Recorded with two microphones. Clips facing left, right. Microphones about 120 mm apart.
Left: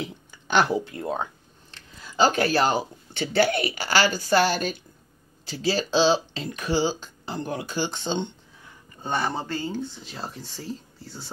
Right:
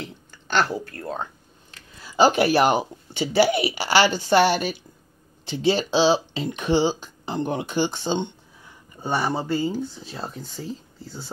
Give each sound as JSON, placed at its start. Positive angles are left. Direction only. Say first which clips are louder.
{"t": 0.0, "sound": "speech", "louder": "left 2 dB", "side_deg": 10}
{"t": 2.0, "sound": "speech", "louder": "right 3 dB", "side_deg": -10}